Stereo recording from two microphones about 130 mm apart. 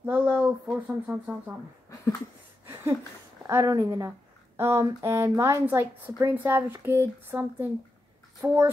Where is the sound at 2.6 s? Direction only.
20° right (ahead or behind).